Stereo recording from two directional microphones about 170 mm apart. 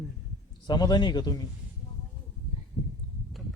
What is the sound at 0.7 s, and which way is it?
Speech, 25° left (ahead or behind).